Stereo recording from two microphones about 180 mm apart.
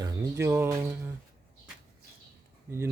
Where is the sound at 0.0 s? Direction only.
20° right (ahead or behind).